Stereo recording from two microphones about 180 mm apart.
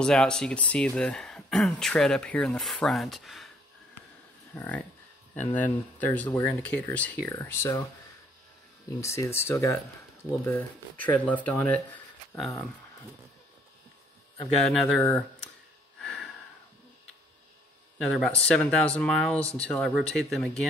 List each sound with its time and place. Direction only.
0.0 s speech: 5° left (ahead or behind)
4.6 s speech: 10° left (ahead or behind)
9.0 s speech: 15° left (ahead or behind)
14.6 s speech: centre (ahead or behind)
16.0 s a sound: 5° left (ahead or behind)
17.9 s speech: centre (ahead or behind)